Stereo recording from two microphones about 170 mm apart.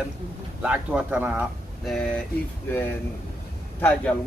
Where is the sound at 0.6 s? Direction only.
10° right (ahead or behind).